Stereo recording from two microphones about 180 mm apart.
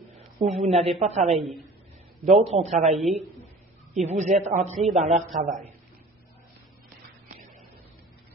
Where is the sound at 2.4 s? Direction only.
35° right (ahead or behind).